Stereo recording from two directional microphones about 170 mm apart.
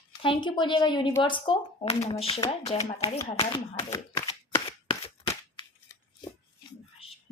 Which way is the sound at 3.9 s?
20° left (ahead or behind).